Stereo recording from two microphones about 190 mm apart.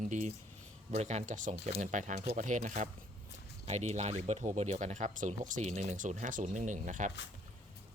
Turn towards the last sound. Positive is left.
turn(degrees=-40)  # may be behind; listen again after turning